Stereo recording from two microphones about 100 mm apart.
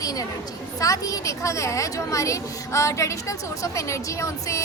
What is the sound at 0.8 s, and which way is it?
A woman's voice, 35° left (ahead or behind).